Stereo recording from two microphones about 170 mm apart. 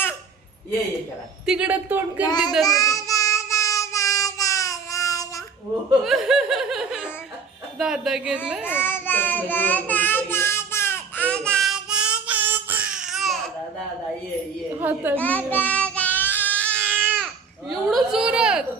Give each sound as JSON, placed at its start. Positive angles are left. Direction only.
{"t": 1.5, "sound": "speech", "side_deg": -5}
{"t": 2.2, "sound": "child singing", "side_deg": 25}
{"t": 6.0, "sound": "a woman's voice", "side_deg": 0}
{"t": 8.6, "sound": "child singing", "side_deg": 10}
{"t": 14.8, "sound": "speech", "side_deg": -10}
{"t": 15.2, "sound": "child singing", "side_deg": 10}
{"t": 16.7, "sound": "baby cry", "side_deg": -10}
{"t": 17.7, "sound": "speech", "side_deg": 0}